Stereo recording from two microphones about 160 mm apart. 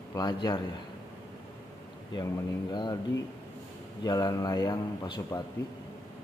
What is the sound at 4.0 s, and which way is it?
Speech, 25° left (ahead or behind).